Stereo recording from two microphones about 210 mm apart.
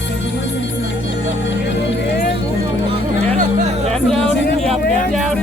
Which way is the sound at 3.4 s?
35° right (ahead or behind).